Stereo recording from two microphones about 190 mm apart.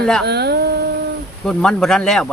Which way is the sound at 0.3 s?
60° right (ahead or behind).